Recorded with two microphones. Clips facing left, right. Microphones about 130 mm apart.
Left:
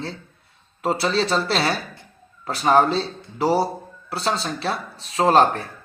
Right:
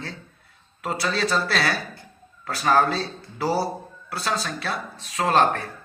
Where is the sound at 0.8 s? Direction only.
30° left (ahead or behind).